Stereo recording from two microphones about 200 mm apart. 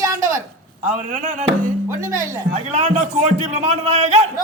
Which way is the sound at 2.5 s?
40° right (ahead or behind).